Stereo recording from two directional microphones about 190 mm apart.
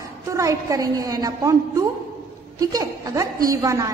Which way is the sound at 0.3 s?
15° right (ahead or behind).